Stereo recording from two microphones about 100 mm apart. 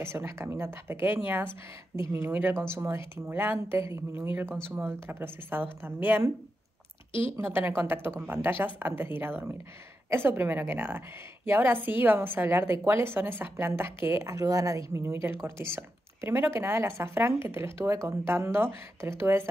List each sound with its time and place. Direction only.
0.0 s a woman's voice: 25° right (ahead or behind)
2.5 s speech: 10° left (ahead or behind)
2.8 s a woman's voice: 25° right (ahead or behind)
7.2 s a woman's voice: 20° right (ahead or behind)